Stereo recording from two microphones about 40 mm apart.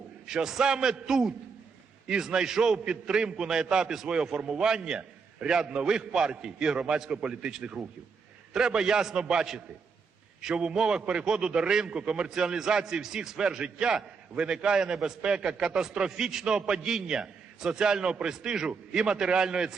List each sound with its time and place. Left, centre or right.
0.3 s a man's voice: centre
11.0 s a man's voice: right
11.3 s a man's voice: centre